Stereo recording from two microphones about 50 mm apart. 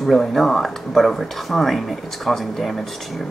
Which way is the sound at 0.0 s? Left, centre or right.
Centre.